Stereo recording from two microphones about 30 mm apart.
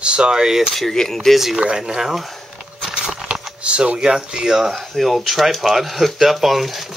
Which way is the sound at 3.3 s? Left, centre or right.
Right.